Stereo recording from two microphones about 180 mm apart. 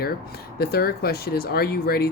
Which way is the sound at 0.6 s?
60° left (ahead or behind).